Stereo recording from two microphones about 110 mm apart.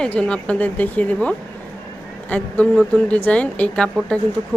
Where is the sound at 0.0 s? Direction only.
10° left (ahead or behind).